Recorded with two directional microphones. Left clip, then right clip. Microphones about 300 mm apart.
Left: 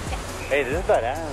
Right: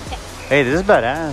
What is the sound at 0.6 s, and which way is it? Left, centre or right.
Speech, right.